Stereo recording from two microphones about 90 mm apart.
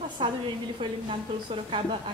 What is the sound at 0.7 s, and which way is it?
A woman's voice, 90° right.